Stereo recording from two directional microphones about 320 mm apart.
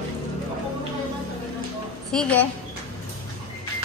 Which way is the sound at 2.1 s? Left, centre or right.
Centre.